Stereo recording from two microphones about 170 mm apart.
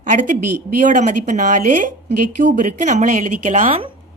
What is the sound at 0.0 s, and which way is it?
A woman's voice, 45° right (ahead or behind).